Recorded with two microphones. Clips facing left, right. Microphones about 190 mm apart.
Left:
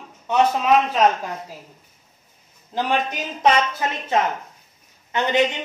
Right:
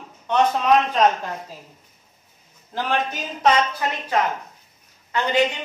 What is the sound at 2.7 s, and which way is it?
A woman's voice, 15° left (ahead or behind).